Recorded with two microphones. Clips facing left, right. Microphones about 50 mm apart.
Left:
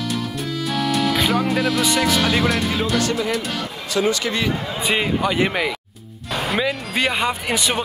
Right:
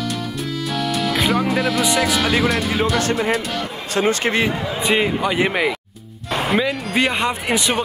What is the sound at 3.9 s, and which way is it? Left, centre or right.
Speech, right.